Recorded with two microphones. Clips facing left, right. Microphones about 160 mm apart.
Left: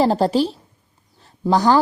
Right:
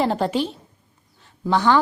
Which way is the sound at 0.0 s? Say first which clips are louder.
Left 4 dB; 35° left (ahead or behind).